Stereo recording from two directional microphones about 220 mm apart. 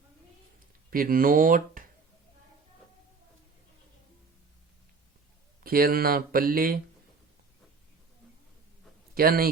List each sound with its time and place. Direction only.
0.9 s speech: 40° right (ahead or behind)
5.6 s speech: 40° right (ahead or behind)
9.1 s speech: 40° right (ahead or behind)